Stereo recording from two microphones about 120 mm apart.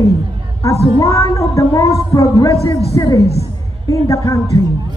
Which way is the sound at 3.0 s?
30° left (ahead or behind).